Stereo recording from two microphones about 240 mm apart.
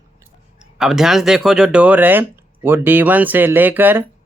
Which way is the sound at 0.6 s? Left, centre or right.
Centre.